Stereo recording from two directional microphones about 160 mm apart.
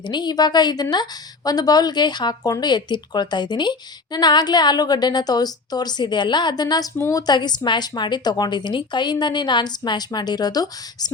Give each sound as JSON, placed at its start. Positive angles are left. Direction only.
{"t": 0.0, "sound": "speech", "side_deg": 25}